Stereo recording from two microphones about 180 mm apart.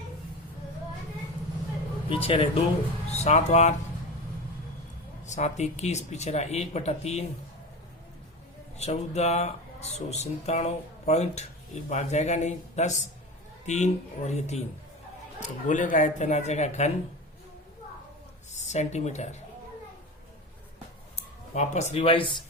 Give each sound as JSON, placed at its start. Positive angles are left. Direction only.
{"t": 2.0, "sound": "speech", "side_deg": 30}
{"t": 5.2, "sound": "speech", "side_deg": 40}
{"t": 8.8, "sound": "speech", "side_deg": 35}
{"t": 18.5, "sound": "speech", "side_deg": 40}
{"t": 21.5, "sound": "speech", "side_deg": 40}